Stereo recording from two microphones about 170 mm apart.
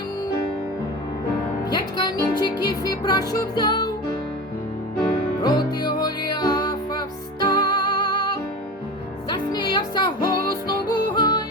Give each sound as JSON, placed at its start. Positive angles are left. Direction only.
{"t": 1.7, "sound": "music", "side_deg": 25}
{"t": 5.0, "sound": "music", "side_deg": 25}
{"t": 9.3, "sound": "music", "side_deg": 25}